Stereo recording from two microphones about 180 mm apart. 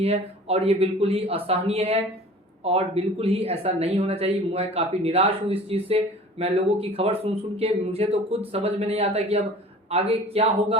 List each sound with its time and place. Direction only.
0.0 s speech: 35° right (ahead or behind)